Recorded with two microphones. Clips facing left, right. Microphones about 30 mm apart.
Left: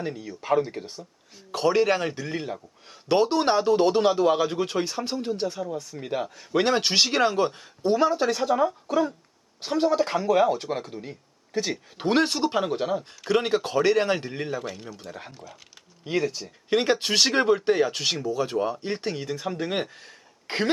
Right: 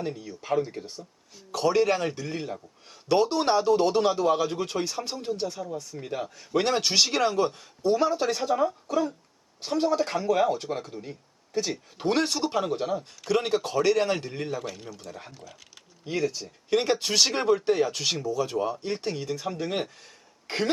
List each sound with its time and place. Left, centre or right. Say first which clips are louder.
0.0 s speech: left 1 dB; centre
20.5 s speech: left 1 dB; left